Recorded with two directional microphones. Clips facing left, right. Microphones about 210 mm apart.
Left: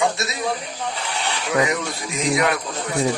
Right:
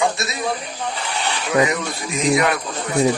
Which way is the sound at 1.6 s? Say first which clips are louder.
Right 2 dB; 55° right (ahead or behind).